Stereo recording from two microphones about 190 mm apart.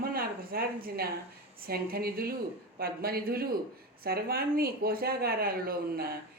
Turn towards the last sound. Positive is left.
turn(degrees=-50)  # may be behind; listen again after turning